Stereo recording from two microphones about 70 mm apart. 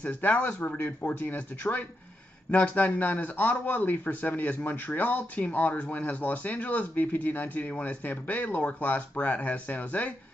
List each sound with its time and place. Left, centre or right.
0.0 s a man's voice: left